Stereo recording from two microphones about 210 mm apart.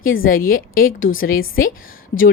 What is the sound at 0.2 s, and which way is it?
A woman's voice, 45° left (ahead or behind).